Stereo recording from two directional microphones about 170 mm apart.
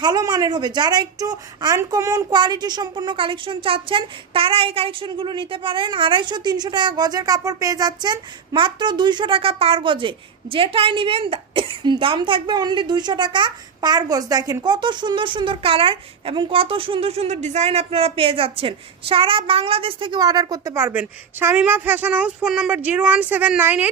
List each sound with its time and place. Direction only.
0.0 s a woman's voice: 25° right (ahead or behind)